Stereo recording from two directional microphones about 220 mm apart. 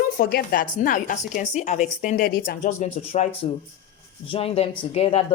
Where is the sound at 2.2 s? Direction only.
45° left (ahead or behind); by 3.3 s 30° left (ahead or behind).